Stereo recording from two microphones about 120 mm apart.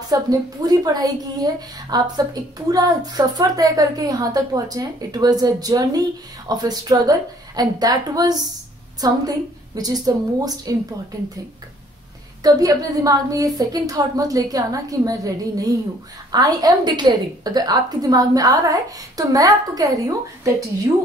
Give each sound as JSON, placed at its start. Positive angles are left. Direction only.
{"t": 0.1, "sound": "a woman's voice", "side_deg": -30}
{"t": 12.4, "sound": "a woman's voice", "side_deg": -30}